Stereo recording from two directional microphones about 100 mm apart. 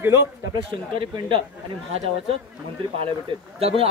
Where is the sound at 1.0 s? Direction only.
55° right (ahead or behind).